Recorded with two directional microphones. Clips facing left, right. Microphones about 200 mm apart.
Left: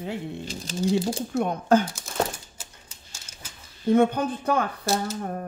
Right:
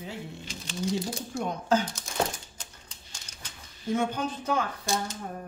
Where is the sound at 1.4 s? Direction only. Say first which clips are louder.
Left 5 dB; 55° left (ahead or behind).